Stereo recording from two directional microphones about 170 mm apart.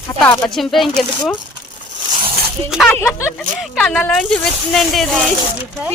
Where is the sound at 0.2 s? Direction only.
5° left (ahead or behind).